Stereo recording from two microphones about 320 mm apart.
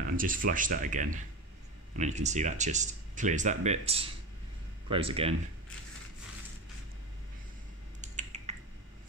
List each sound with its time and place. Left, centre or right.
0.1 s speech: right
8.0 s finger snapping: right